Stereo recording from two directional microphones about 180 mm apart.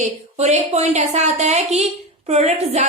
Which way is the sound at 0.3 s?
40° right (ahead or behind).